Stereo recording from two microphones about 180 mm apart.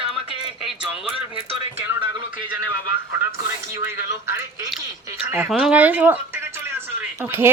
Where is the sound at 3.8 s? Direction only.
15° right (ahead or behind).